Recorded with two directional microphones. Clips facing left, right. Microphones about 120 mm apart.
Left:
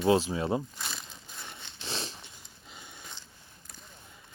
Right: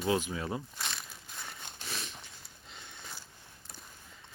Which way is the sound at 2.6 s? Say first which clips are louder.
Left 2 dB; 10° left (ahead or behind).